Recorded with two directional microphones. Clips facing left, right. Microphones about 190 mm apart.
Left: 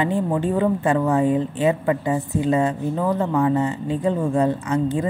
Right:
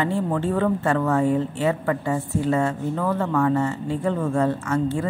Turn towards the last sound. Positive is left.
turn(degrees=15)  # may be behind; listen again after turning